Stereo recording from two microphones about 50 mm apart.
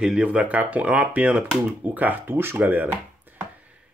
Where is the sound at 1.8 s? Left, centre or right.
Right.